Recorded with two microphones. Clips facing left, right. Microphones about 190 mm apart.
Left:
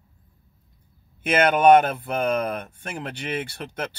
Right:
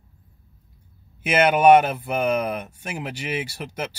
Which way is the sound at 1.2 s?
5° right (ahead or behind).